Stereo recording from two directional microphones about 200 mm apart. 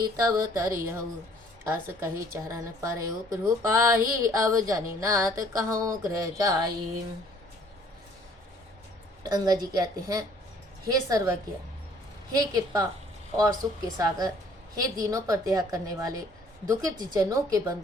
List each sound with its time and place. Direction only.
0.0 s a woman's voice: 15° right (ahead or behind)
9.3 s a woman's voice: 20° right (ahead or behind)